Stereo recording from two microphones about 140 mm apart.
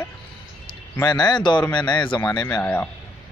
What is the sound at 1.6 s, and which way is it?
Speech, 10° left (ahead or behind).